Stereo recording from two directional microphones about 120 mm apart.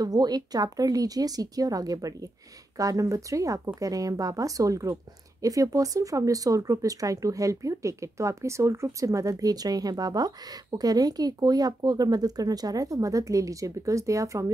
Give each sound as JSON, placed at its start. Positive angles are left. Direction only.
{"t": 0.0, "sound": "speech", "side_deg": -35}